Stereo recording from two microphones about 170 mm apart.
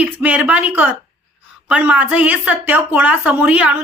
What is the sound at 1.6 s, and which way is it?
A woman's voice, 5° right (ahead or behind).